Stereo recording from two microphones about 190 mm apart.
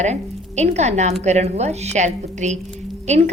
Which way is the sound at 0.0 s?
35° right (ahead or behind).